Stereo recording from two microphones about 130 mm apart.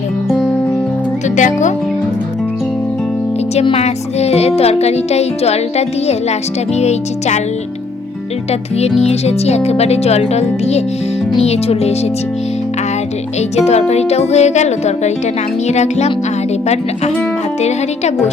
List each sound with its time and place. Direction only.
1.4 s speech: 70° left (ahead or behind)
3.5 s music: 50° left (ahead or behind)
9.0 s music: 55° left (ahead or behind)
13.6 s music: 55° left (ahead or behind)